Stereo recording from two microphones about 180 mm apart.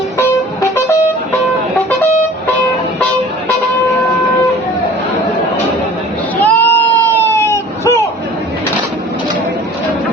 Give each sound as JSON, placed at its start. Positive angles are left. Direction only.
{"t": 0.2, "sound": "music", "side_deg": 15}
{"t": 6.4, "sound": "goat", "side_deg": 10}